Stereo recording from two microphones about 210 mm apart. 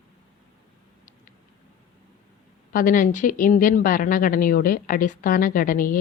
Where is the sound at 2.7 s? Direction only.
40° left (ahead or behind).